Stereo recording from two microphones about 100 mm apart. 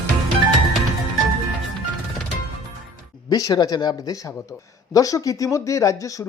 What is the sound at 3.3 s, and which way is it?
Speech, 35° left (ahead or behind).